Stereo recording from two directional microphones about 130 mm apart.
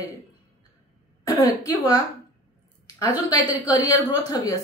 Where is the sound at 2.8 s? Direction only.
25° left (ahead or behind).